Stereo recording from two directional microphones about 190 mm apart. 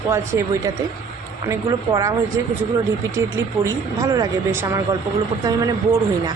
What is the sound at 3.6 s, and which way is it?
A woman's voice, 15° right (ahead or behind).